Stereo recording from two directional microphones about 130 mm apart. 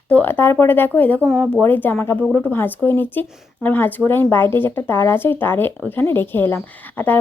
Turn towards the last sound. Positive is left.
turn(degrees=15)  # may be behind; listen again after turning